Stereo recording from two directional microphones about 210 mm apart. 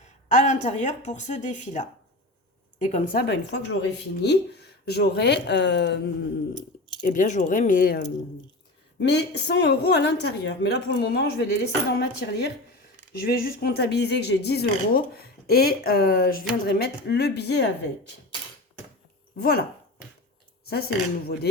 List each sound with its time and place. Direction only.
0.0 s a woman's voice: 35° left (ahead or behind); by 6.0 s 55° left (ahead or behind)
6.5 s a sound: 20° left (ahead or behind)
7.0 s a woman's voice: 35° left (ahead or behind)
19.4 s a woman's voice: 50° left (ahead or behind)
20.7 s a woman's voice: 50° left (ahead or behind)